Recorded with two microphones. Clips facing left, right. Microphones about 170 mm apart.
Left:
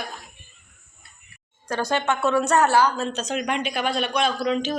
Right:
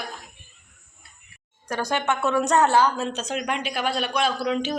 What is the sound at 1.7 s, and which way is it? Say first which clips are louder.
A woman's voice: left 1 dB; 10° right (ahead or behind).